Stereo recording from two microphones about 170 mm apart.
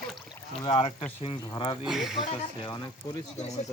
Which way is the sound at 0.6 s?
30° left (ahead or behind).